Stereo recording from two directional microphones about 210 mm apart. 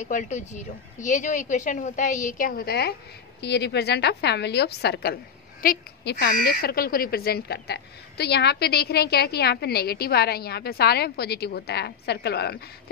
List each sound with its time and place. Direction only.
0.0 s a woman's voice: 35° left (ahead or behind); by 12.6 s 50° left (ahead or behind)